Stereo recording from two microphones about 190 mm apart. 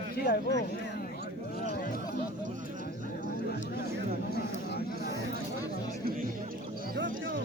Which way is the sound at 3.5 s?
55° left (ahead or behind).